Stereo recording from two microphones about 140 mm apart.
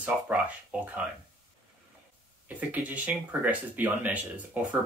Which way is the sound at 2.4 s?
10° right (ahead or behind).